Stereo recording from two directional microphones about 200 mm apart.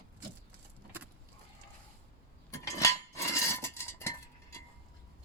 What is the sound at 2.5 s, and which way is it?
Cutlery, 15° left (ahead or behind).